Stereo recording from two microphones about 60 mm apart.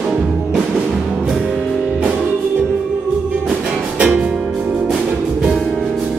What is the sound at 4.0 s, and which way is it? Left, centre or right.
Music, centre.